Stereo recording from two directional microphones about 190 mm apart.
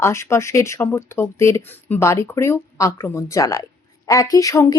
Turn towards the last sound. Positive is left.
turn(degrees=15)  # may be behind; listen again after turning